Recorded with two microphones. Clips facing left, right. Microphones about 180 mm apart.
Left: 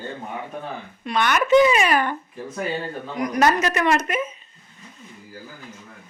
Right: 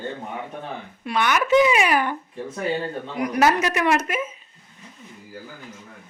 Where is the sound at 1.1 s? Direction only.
10° right (ahead or behind).